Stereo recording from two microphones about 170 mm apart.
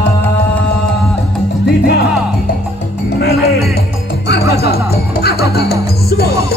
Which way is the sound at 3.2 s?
70° left (ahead or behind).